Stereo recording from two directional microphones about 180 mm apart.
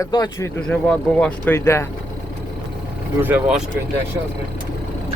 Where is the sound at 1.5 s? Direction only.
15° left (ahead or behind).